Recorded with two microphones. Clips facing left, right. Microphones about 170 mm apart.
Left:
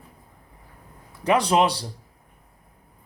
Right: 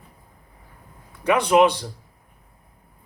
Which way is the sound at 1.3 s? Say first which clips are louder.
Right 3 dB; 35° left (ahead or behind).